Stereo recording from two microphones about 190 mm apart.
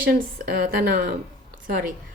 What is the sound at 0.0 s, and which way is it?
Speech, 55° right (ahead or behind).